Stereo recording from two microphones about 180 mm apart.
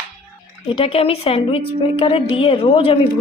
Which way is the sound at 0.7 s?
30° left (ahead or behind).